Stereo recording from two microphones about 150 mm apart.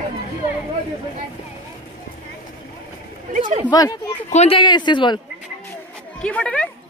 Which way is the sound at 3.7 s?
25° left (ahead or behind).